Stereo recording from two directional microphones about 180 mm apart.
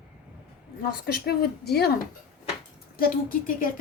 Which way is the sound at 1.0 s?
60° left (ahead or behind).